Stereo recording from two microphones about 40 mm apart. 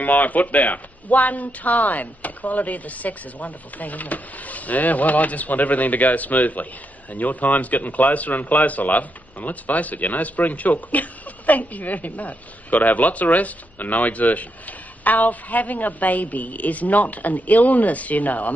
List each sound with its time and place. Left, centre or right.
0.0 s speech: left